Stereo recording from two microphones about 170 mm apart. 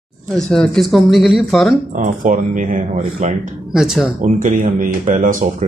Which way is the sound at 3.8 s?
5° right (ahead or behind).